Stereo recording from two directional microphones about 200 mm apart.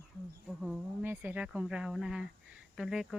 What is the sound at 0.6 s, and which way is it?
Speech, 5° right (ahead or behind).